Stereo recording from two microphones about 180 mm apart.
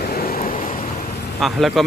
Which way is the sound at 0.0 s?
55° left (ahead or behind).